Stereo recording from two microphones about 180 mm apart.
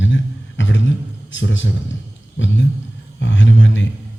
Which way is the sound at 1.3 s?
90° left.